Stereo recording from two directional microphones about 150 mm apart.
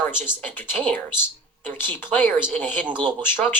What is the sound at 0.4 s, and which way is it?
A man's voice, 15° left (ahead or behind).